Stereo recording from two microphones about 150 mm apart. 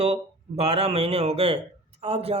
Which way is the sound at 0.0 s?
40° right (ahead or behind).